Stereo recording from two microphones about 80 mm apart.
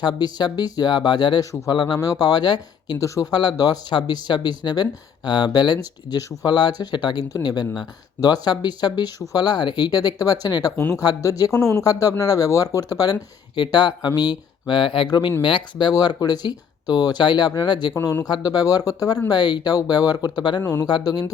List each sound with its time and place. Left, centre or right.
0.0 s speech: left
1.7 s speech: left
2.0 s speech: left
3.0 s speech: left
11.5 s speech: left
11.8 s speech: left
13.6 s speech: left
18.3 s speech: left
19.3 s speech: left
19.7 s speech: left
20.8 s speech: left